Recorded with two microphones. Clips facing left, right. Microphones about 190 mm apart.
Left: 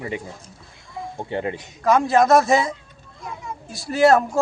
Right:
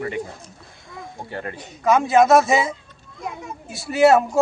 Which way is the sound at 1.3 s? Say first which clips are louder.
Left 6 dB; 20° left (ahead or behind).